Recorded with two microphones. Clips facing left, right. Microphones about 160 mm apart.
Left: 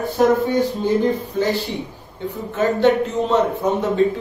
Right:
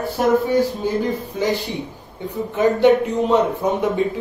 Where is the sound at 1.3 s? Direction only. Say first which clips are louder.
Left 1 dB; 15° right (ahead or behind).